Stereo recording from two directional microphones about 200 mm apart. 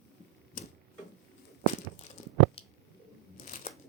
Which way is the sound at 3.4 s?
35° left (ahead or behind).